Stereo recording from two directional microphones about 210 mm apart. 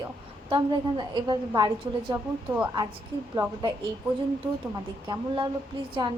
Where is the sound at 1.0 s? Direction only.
20° right (ahead or behind).